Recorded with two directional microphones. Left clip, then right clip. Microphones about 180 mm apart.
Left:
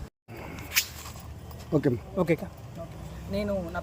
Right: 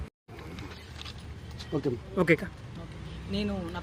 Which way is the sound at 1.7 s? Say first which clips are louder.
Left 5 dB; 65° left (ahead or behind).